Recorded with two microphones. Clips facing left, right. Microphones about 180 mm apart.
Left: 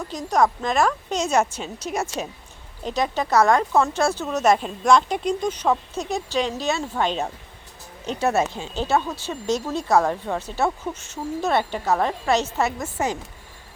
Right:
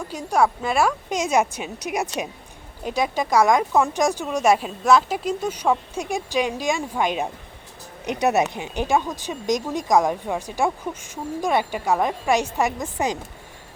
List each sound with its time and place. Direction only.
0.1 s speech: 10° right (ahead or behind)